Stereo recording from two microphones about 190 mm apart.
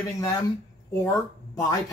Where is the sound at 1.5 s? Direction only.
20° left (ahead or behind).